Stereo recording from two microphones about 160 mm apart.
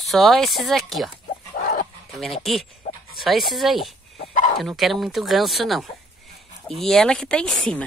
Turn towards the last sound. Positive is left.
turn(degrees=5)  # may be behind; listen again after turning